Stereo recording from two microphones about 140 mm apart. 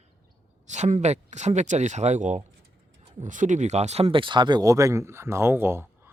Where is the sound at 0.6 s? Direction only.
55° right (ahead or behind); by 6.1 s 15° right (ahead or behind).